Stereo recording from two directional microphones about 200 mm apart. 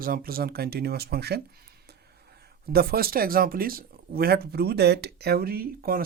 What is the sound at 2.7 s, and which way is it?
Speech, 50° right (ahead or behind).